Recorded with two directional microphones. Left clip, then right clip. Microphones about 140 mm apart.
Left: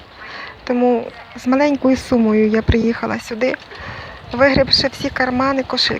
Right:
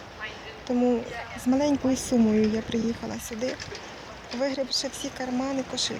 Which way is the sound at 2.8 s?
45° left (ahead or behind).